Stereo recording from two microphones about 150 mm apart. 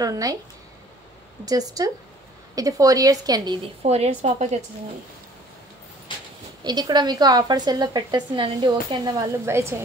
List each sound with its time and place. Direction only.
0.0 s a woman's voice: 25° right (ahead or behind)
1.4 s a woman's voice: 25° right (ahead or behind)
3.8 s speech: 45° right (ahead or behind)
6.1 s a sound: 35° left (ahead or behind)
6.6 s a woman's voice: 30° right (ahead or behind)